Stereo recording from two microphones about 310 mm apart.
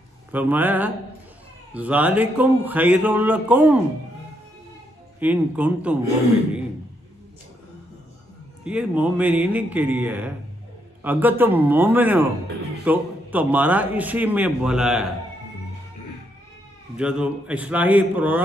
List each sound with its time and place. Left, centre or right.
0.3 s a man's voice: centre
5.2 s a man's voice: centre
8.6 s a man's voice: centre
16.9 s a man's voice: centre